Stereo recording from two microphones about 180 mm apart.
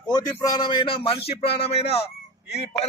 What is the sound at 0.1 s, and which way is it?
A man's voice, 20° left (ahead or behind).